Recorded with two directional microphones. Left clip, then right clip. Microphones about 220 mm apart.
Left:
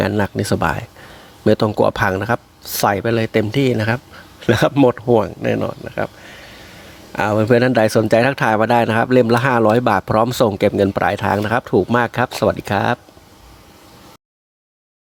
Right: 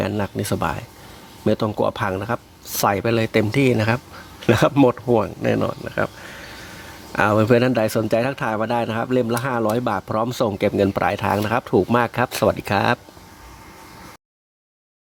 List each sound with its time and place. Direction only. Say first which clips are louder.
0.0 s speech: left 5 dB; 15° left (ahead or behind)